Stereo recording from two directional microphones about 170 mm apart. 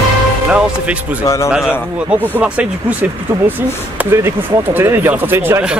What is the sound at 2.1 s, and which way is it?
Speech, 10° right (ahead or behind).